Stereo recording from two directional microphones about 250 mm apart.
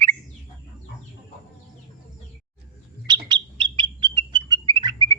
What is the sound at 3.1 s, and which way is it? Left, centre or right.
Bird, centre.